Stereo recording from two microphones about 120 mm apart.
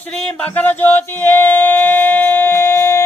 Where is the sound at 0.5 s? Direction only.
15° left (ahead or behind).